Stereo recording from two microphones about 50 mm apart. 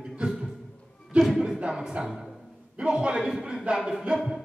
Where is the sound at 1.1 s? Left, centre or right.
Right.